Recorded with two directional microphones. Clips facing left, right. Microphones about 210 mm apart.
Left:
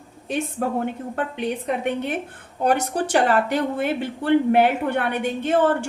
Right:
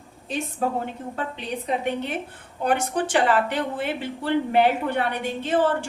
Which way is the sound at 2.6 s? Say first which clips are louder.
Left 2 dB; 40° left (ahead or behind).